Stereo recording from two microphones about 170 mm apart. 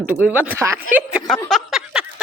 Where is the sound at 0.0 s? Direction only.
10° right (ahead or behind).